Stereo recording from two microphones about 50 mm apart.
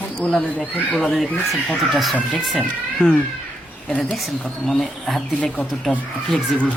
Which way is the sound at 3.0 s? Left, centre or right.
Left.